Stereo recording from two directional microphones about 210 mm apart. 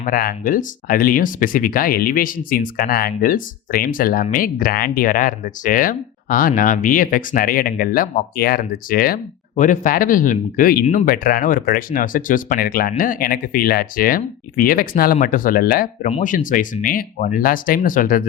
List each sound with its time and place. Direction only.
0.0 s speech: 45° left (ahead or behind)
16.0 s speech: 35° left (ahead or behind)